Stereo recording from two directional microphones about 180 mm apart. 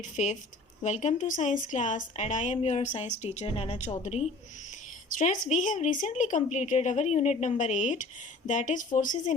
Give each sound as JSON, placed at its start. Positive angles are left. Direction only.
{"t": 0.0, "sound": "a woman's voice", "side_deg": 40}